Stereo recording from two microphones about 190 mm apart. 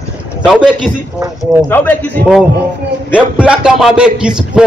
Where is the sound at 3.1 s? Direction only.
5° right (ahead or behind).